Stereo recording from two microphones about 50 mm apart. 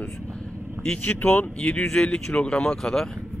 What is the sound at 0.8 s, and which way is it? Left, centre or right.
Speech, left.